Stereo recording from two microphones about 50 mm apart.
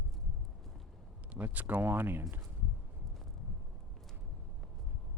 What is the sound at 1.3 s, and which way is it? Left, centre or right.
Speech, right.